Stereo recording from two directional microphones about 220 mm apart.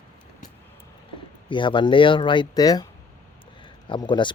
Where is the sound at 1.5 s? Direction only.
20° left (ahead or behind).